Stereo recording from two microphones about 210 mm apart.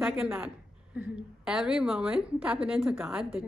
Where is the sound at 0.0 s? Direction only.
5° right (ahead or behind).